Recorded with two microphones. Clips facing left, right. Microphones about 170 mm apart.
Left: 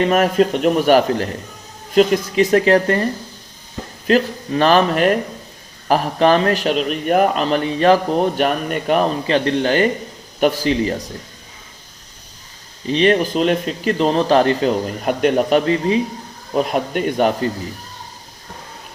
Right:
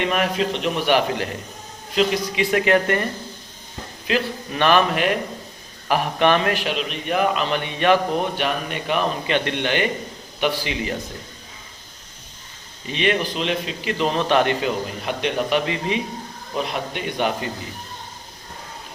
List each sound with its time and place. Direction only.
0.0 s a man's voice: 45° left (ahead or behind)
12.9 s a man's voice: 40° left (ahead or behind)